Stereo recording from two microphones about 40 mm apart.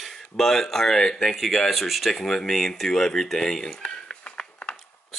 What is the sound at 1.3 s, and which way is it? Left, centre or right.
Speech, centre.